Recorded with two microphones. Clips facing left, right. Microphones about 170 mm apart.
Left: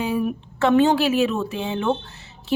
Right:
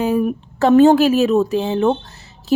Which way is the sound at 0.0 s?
45° right (ahead or behind).